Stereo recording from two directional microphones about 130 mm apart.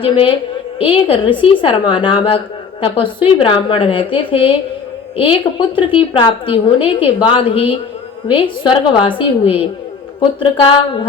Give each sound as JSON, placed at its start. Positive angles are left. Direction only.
{"t": 0.0, "sound": "a woman's voice", "side_deg": 40}